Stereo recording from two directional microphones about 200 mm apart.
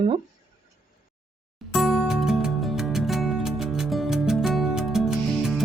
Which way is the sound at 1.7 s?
Centre (ahead or behind).